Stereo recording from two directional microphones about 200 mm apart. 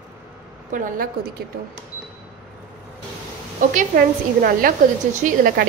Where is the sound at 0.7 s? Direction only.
40° right (ahead or behind).